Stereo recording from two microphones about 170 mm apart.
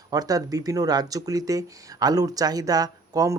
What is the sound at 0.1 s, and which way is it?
Speech, 20° right (ahead or behind).